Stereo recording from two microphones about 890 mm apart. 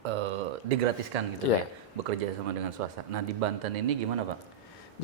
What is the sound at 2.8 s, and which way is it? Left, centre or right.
Speech, right.